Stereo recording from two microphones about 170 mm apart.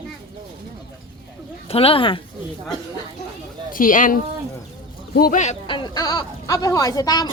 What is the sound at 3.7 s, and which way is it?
Speech, 50° left (ahead or behind).